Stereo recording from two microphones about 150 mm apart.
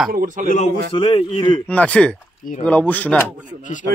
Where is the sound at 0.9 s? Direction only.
35° left (ahead or behind).